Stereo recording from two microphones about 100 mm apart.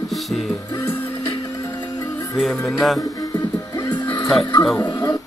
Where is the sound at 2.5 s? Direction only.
30° left (ahead or behind).